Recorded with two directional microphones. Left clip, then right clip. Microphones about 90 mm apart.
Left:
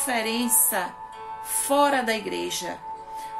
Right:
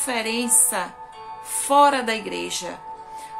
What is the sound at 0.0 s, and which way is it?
A woman's voice, 40° right (ahead or behind).